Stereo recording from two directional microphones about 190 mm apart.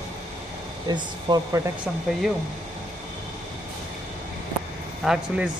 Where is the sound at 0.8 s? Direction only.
20° right (ahead or behind).